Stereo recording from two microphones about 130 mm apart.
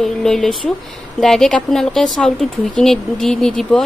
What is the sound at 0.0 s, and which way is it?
Speech, 5° left (ahead or behind).